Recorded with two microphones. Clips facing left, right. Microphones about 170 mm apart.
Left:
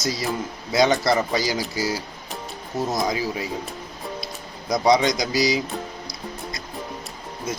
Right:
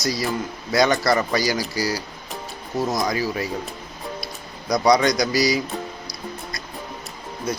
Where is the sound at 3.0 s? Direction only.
20° left (ahead or behind).